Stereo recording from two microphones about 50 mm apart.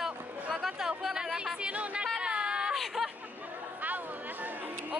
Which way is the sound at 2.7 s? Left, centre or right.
Centre.